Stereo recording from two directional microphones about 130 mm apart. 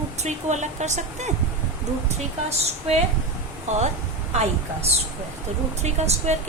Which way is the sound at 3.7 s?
65° right (ahead or behind).